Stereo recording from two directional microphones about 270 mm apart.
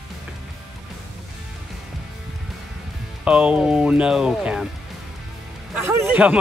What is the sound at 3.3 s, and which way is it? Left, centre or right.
Speech, centre.